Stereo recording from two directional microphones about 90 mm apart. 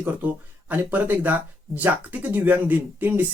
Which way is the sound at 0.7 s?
20° right (ahead or behind).